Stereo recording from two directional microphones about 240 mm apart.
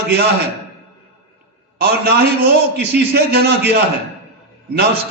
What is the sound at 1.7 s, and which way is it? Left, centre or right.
A man's voice, right.